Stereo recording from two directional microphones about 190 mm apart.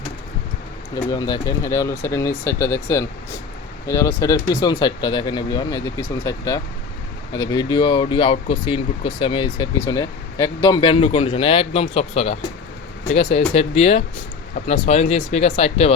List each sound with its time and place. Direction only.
1.1 s speech: 20° left (ahead or behind)